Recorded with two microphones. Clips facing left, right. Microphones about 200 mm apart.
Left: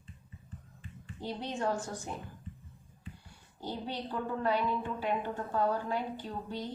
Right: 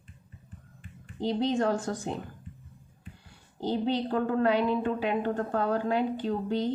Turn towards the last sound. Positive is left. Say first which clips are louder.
# right 10 dB
turn(degrees=-80)